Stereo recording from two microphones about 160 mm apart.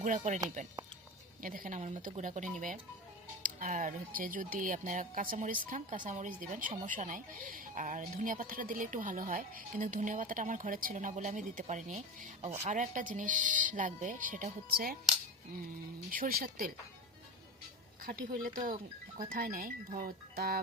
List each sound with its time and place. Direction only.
0.0 s speech: 50° right (ahead or behind)
1.4 s speech: 60° right (ahead or behind)
16.0 s speech: 60° right (ahead or behind)
18.0 s speech: 60° right (ahead or behind)